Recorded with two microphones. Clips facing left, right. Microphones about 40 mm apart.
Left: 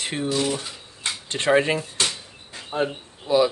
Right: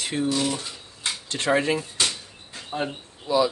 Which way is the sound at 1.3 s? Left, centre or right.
Left.